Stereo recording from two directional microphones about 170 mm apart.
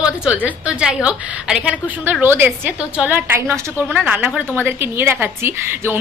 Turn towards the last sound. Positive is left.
turn(degrees=-15)  # may be behind; listen again after turning